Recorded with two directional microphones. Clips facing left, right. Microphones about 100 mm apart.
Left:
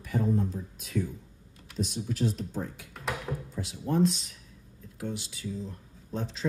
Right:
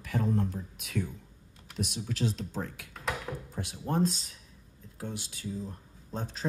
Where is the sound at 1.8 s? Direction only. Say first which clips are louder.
Left 2 dB; 80° right.